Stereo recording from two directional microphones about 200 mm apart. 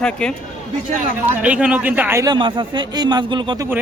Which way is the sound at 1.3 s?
5° right (ahead or behind).